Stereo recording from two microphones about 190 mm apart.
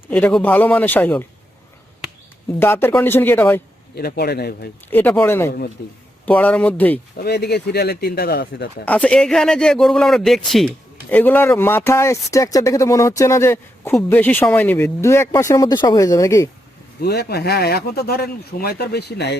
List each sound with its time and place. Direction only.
0.1 s speech: 5° left (ahead or behind)
2.6 s speech: 10° left (ahead or behind)
3.9 s speech: 55° left (ahead or behind)
4.9 s speech: 10° left (ahead or behind)
5.5 s speech: 55° left (ahead or behind)
6.2 s speech: 5° left (ahead or behind)
7.2 s speech: 60° left (ahead or behind)
8.8 s speech: 5° left (ahead or behind)
17.0 s speech: 55° left (ahead or behind)